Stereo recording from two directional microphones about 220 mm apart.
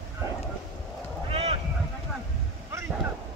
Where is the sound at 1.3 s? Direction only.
30° right (ahead or behind).